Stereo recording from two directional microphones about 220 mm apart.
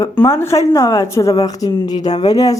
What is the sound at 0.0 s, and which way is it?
A woman's voice, 10° left (ahead or behind).